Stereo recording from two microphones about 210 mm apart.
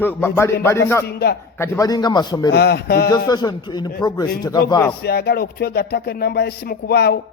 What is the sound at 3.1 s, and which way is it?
A man's voice, 20° left (ahead or behind).